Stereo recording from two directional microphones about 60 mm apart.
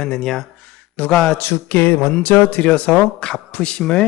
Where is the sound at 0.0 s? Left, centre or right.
Centre.